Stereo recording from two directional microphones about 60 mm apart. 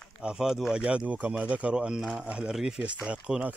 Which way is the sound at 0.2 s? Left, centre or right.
Centre.